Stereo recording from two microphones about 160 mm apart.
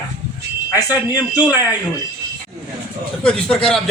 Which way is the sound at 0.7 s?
25° left (ahead or behind).